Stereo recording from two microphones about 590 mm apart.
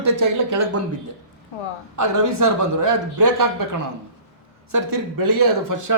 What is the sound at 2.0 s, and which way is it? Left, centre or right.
A man's voice, right.